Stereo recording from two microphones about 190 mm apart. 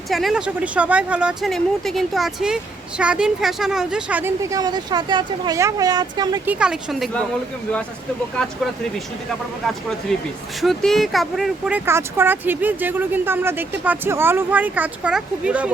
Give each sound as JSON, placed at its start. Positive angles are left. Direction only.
{"t": 0.1, "sound": "speech", "side_deg": 0}
{"t": 6.4, "sound": "speech", "side_deg": -5}
{"t": 10.6, "sound": "speech", "side_deg": 0}